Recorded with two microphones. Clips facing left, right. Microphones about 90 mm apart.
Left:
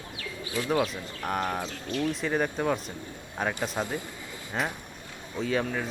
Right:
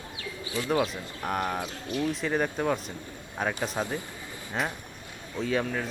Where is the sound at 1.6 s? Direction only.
15° right (ahead or behind).